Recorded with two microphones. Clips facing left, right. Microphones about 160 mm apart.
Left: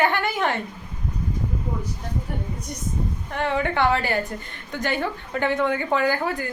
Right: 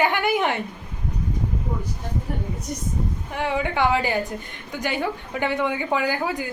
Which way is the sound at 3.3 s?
10° right (ahead or behind).